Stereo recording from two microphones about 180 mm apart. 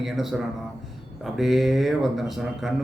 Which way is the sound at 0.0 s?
Centre (ahead or behind).